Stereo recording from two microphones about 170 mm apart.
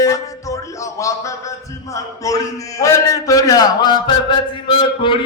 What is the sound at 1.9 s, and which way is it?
A man's voice, 20° left (ahead or behind).